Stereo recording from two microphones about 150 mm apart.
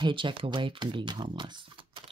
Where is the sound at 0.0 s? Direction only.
35° right (ahead or behind).